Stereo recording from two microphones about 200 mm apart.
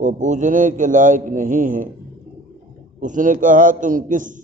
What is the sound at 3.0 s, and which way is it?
A man's voice, 40° right (ahead or behind).